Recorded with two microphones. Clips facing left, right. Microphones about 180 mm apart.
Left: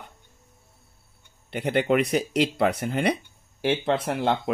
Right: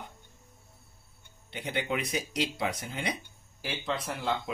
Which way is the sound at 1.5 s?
60° left (ahead or behind).